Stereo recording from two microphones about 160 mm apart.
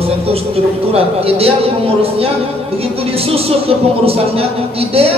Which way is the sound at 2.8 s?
40° right (ahead or behind).